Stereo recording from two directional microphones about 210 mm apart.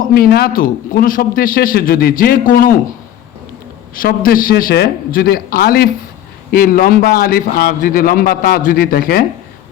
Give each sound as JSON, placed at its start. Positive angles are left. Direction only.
{"t": 0.0, "sound": "a man's voice", "side_deg": 45}
{"t": 4.0, "sound": "a man's voice", "side_deg": 40}